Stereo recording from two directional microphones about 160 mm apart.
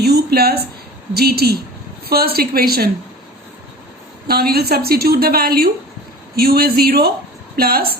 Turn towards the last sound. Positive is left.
turn(degrees=-70)  # may be behind; listen again after turning